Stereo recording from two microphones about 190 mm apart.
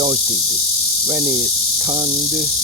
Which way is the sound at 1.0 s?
20° right (ahead or behind).